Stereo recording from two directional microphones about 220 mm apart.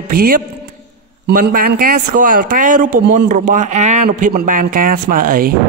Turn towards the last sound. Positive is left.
turn(degrees=-40)  # may be behind; listen again after turning